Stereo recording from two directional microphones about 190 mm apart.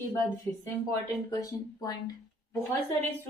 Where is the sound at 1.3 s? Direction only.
20° left (ahead or behind).